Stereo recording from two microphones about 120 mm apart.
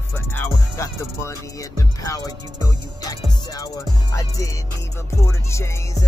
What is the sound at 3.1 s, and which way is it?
Music, 30° left (ahead or behind).